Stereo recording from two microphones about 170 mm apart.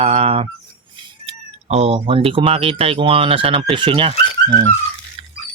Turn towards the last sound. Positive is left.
turn(degrees=-30)  # may be behind; listen again after turning